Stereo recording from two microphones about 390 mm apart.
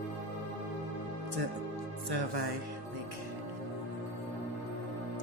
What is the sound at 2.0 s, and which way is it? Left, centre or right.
Speech, right.